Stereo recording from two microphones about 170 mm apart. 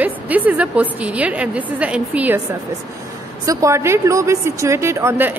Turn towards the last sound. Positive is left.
turn(degrees=-15)  # may be behind; listen again after turning